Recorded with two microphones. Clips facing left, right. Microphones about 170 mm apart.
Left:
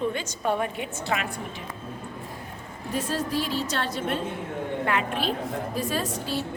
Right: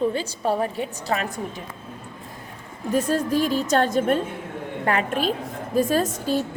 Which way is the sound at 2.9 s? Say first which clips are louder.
Right 6 dB; 45° right (ahead or behind).